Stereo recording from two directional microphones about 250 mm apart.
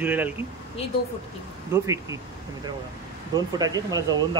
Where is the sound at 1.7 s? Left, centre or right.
Centre.